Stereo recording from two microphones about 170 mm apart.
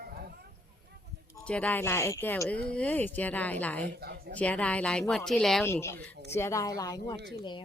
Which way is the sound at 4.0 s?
65° right (ahead or behind).